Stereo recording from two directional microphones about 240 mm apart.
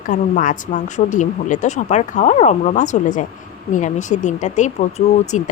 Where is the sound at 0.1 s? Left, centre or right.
Left.